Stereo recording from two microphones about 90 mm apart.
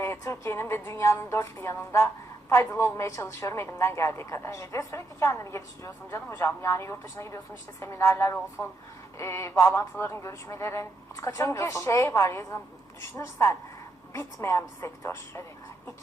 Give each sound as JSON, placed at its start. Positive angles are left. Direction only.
{"t": 0.0, "sound": "a woman's voice", "side_deg": 30}